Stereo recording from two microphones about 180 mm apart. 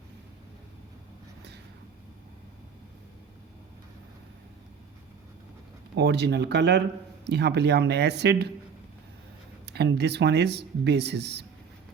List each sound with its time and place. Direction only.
5.9 s speech: 70° right (ahead or behind)
9.6 s speech: 70° right (ahead or behind)